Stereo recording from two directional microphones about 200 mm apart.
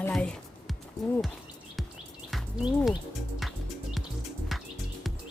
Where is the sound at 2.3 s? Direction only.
Centre (ahead or behind).